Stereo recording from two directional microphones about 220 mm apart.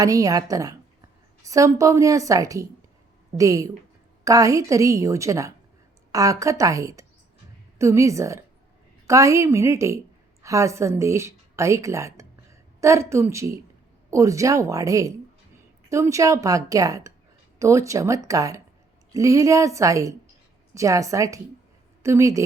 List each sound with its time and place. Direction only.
0.0 s a woman's voice: 15° right (ahead or behind)